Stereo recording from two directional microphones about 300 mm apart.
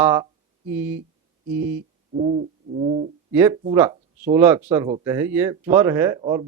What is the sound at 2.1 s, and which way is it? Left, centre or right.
Bird, right.